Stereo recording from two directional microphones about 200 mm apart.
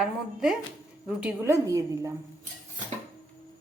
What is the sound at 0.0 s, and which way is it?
A woman's voice, centre (ahead or behind).